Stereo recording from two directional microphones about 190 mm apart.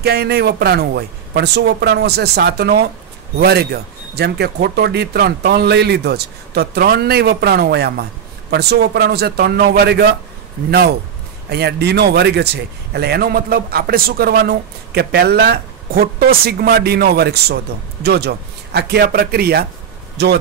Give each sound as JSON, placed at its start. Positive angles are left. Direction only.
{"t": 0.0, "sound": "speech", "side_deg": -55}